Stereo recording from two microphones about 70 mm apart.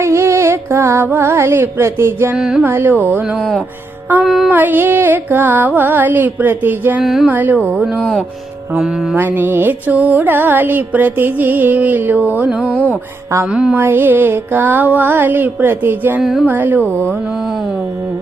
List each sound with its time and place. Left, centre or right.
0.0 s music: right
2.3 s music: centre
2.6 s music: right
3.3 s speech: centre
4.4 s music: right
7.0 s speech: centre
7.3 s music: right
9.1 s music: right; by 13.7 s centre
13.7 s music: right
16.2 s speech: centre
16.5 s music: right